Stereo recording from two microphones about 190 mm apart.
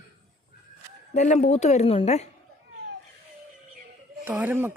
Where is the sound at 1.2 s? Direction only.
40° left (ahead or behind).